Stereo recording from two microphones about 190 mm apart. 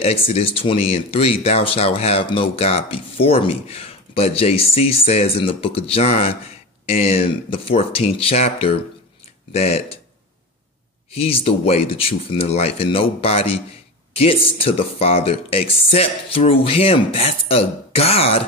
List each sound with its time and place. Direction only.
0.0 s speech: 30° left (ahead or behind)
11.1 s speech: 30° left (ahead or behind)